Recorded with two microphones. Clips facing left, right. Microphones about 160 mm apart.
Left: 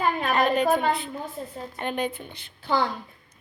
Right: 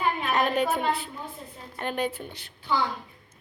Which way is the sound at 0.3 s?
5° right (ahead or behind).